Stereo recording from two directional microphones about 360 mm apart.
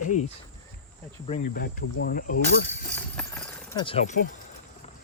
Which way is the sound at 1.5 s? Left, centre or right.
Left.